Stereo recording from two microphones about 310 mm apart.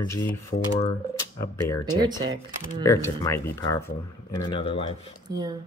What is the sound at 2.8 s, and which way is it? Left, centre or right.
Speech, centre.